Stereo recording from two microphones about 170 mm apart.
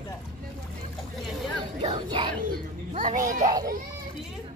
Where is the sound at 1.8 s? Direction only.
30° right (ahead or behind).